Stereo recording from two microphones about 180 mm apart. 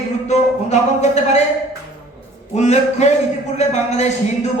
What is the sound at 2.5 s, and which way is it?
Speech, 40° left (ahead or behind).